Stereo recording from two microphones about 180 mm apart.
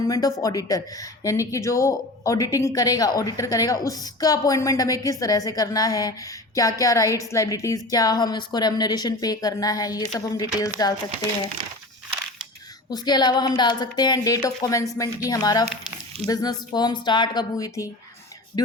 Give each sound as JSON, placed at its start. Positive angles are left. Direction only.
{"t": 0.0, "sound": "speech", "side_deg": 20}
{"t": 12.9, "sound": "speech", "side_deg": 25}